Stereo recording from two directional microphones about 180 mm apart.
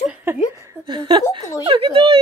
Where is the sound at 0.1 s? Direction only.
10° right (ahead or behind).